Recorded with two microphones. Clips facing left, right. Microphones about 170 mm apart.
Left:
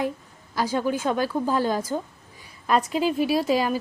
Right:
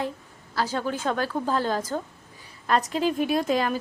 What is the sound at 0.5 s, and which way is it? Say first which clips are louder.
A woman's voice: left 3 dB; 15° left (ahead or behind).